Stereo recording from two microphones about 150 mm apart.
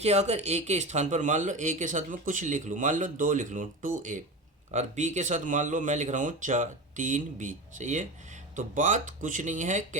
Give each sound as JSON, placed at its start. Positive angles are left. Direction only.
{"t": 0.0, "sound": "speech", "side_deg": -45}